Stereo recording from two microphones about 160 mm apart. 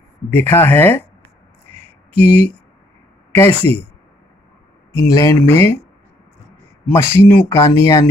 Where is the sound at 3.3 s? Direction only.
10° left (ahead or behind).